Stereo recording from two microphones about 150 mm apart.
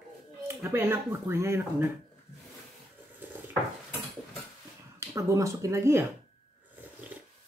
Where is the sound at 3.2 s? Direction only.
10° right (ahead or behind).